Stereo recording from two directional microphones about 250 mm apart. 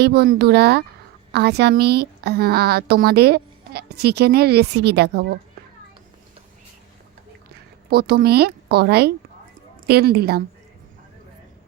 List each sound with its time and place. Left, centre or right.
0.0 s speech: right
7.9 s speech: right